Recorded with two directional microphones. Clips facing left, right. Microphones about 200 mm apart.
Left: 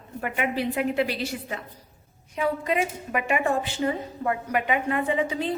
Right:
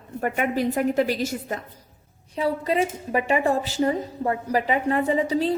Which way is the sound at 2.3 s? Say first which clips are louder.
Right 2 dB; 35° right (ahead or behind).